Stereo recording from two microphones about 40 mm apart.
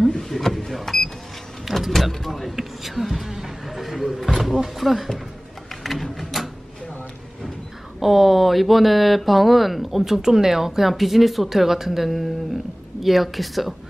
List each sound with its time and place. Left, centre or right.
0.1 s power windows: centre
1.7 s vehicle: centre
5.9 s printer: centre
6.4 s a sound: centre
8.0 s speech: centre